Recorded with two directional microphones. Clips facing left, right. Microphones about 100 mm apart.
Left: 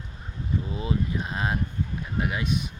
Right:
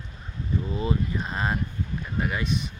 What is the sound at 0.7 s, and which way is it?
Speech, 5° left (ahead or behind).